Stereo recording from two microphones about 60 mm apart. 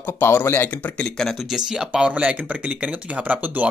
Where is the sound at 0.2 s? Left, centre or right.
Left.